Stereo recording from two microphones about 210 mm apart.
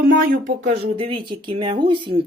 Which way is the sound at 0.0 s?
45° right (ahead or behind).